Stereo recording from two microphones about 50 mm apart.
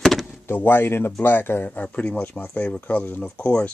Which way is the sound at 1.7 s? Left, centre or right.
Left.